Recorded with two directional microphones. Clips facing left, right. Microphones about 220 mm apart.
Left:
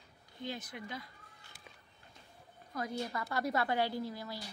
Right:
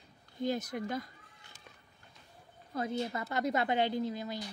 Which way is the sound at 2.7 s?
25° right (ahead or behind).